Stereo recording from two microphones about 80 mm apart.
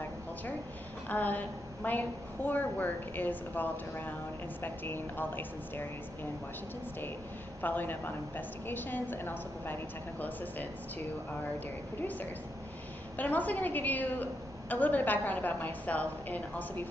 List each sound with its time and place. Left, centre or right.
1.0 s a woman's voice: centre
7.6 s a woman's voice: left
13.2 s a woman's voice: left